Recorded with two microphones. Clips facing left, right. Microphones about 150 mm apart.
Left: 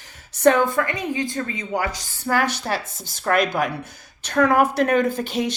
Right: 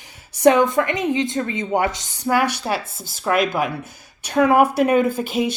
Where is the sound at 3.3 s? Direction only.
5° right (ahead or behind).